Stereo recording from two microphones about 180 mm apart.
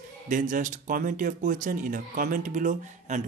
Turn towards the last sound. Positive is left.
turn(degrees=-45)  # may be behind; listen again after turning